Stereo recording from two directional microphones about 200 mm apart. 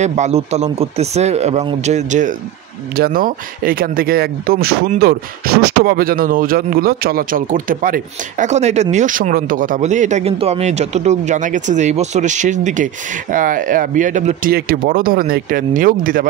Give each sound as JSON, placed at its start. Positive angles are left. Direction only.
{"t": 0.0, "sound": "speech", "side_deg": -35}